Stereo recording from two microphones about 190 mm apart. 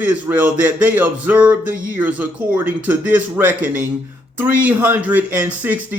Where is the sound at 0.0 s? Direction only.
10° right (ahead or behind).